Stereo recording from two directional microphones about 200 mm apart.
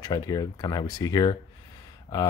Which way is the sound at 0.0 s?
20° left (ahead or behind).